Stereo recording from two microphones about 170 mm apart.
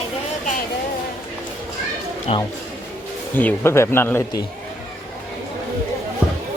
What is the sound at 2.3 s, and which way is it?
Speech, 35° left (ahead or behind).